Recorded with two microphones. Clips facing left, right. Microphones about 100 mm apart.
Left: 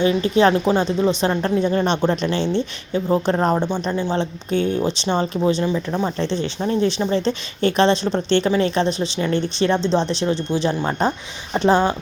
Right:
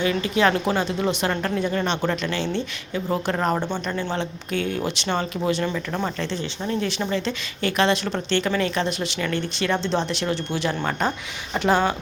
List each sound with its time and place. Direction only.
0.0 s a woman's voice: 30° left (ahead or behind)
0.9 s speech: 10° right (ahead or behind)
1.2 s a woman's voice: 25° left (ahead or behind)
3.5 s speech: 10° left (ahead or behind)
4.1 s a woman's voice: 25° left (ahead or behind)
9.8 s speech: 15° right (ahead or behind)
10.1 s a woman's voice: 25° left (ahead or behind)